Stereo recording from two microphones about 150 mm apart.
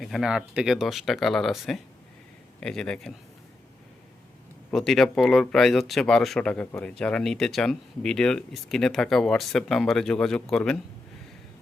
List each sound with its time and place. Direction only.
0.0 s speech: centre (ahead or behind)
4.7 s speech: centre (ahead or behind)